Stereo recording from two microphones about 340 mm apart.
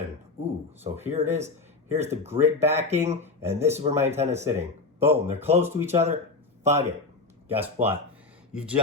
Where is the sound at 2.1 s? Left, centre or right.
Centre.